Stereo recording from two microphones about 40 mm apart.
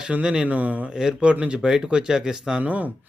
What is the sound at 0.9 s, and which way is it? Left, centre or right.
Speech, centre.